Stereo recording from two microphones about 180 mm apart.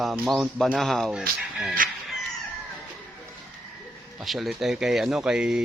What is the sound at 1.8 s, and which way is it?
Speech, 50° right (ahead or behind).